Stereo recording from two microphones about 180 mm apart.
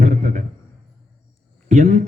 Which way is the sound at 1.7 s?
45° right (ahead or behind).